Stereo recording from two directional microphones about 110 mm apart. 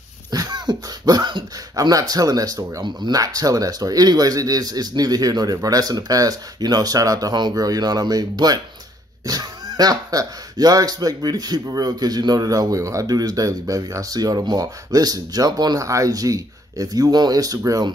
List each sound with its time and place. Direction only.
0.3 s speech: 35° right (ahead or behind)